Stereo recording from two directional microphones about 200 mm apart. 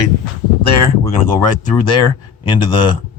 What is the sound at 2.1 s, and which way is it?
Speech, 20° left (ahead or behind).